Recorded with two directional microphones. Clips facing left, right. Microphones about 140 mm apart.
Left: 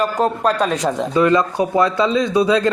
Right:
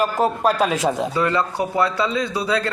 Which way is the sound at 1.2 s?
20° left (ahead or behind).